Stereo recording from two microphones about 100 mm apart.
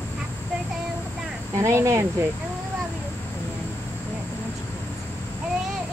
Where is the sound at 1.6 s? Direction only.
30° right (ahead or behind).